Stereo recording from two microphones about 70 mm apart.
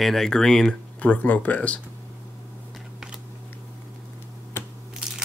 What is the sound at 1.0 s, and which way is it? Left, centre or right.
Speech, left.